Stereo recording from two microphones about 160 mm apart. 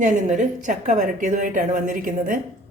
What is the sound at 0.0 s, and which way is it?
A woman's voice, 50° right (ahead or behind).